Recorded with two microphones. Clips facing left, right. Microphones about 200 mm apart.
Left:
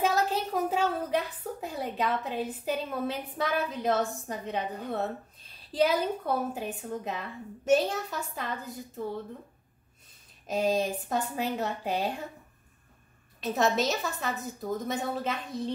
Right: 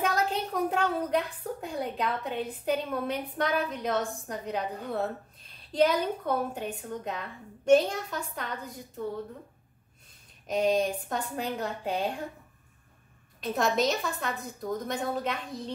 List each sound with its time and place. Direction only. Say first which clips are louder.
0.0 s a woman's voice: left 1 dB; 5° left (ahead or behind)
10.5 s a woman's voice: right 1 dB; 5° left (ahead or behind)
13.4 s a woman's voice: even; 5° left (ahead or behind)